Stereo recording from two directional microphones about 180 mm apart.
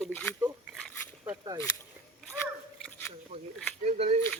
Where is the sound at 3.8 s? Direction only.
40° right (ahead or behind).